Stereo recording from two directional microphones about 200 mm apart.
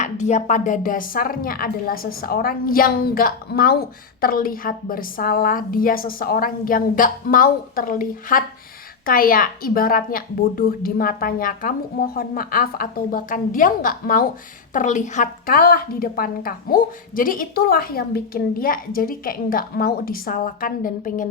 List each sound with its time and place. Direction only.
0.0 s a woman's voice: 35° left (ahead or behind)